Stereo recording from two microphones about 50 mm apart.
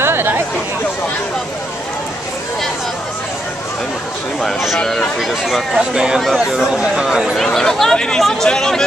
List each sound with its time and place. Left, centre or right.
0.0 s chatter: right
4.8 s speech: centre
5.8 s speech: centre
7.3 s speech: centre